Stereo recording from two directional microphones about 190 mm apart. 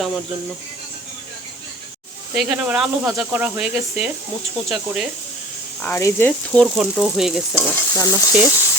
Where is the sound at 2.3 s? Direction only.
5° right (ahead or behind).